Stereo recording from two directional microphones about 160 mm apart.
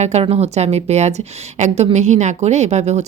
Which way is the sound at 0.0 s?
40° right (ahead or behind).